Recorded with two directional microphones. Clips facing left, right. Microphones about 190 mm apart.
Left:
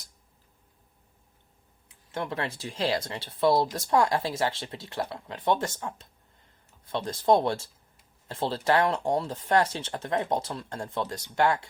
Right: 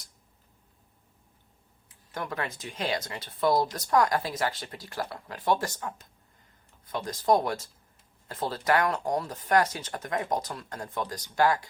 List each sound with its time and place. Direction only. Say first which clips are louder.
2.1 s speech: left 2 dB; 25° left (ahead or behind)